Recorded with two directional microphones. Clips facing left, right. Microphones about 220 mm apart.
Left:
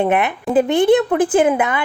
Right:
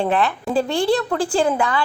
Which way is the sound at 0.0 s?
20° left (ahead or behind).